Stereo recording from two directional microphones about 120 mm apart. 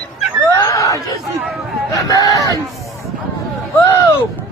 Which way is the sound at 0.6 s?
30° left (ahead or behind).